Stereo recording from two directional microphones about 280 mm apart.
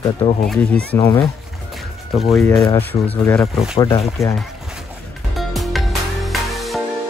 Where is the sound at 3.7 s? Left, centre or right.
Centre.